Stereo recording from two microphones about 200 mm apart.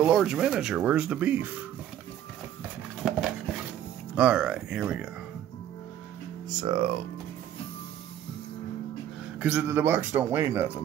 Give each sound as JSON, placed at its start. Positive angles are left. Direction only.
{"t": 0.0, "sound": "speech", "side_deg": 0}
{"t": 3.0, "sound": "a sound", "side_deg": 0}
{"t": 4.1, "sound": "speech", "side_deg": -5}
{"t": 6.6, "sound": "speech", "side_deg": -30}
{"t": 9.4, "sound": "speech", "side_deg": -10}